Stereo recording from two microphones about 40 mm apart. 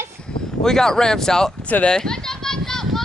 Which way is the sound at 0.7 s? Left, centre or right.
Centre.